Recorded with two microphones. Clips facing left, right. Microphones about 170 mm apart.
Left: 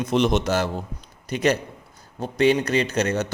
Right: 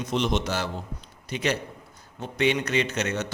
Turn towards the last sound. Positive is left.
turn(degrees=35)  # may be behind; listen again after turning